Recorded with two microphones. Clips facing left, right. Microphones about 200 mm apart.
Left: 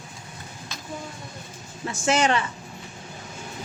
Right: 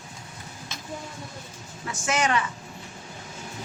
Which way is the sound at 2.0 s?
30° left (ahead or behind).